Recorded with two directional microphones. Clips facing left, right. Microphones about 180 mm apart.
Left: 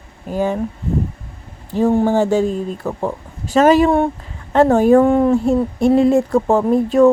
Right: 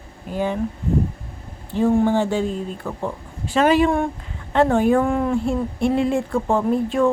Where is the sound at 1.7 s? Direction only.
40° left (ahead or behind).